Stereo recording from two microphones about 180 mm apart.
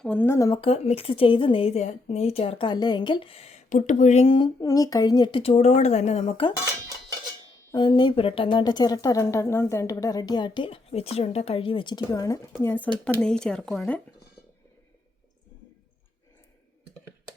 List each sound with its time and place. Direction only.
0.0 s speech: 10° left (ahead or behind)
0.6 s speech: 35° left (ahead or behind)
4.6 s speech: 20° left (ahead or behind)
7.7 s speech: 25° left (ahead or behind); by 14.0 s 5° left (ahead or behind)